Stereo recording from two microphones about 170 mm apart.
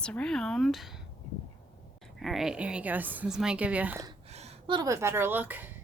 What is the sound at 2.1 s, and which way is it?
A woman's voice, centre (ahead or behind).